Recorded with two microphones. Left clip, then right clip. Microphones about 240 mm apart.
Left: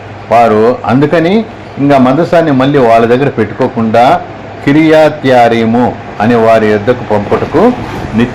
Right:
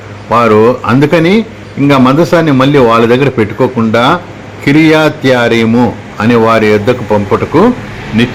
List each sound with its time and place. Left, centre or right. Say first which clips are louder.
0.3 s a man's voice: even; right